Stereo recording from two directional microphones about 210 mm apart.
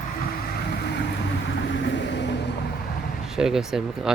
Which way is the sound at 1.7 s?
60° left (ahead or behind).